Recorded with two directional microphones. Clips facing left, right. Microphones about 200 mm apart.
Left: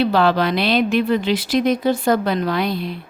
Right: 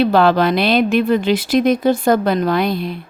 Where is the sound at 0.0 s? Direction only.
50° right (ahead or behind).